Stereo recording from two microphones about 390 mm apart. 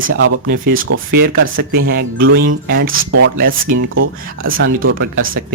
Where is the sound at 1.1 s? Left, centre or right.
Right.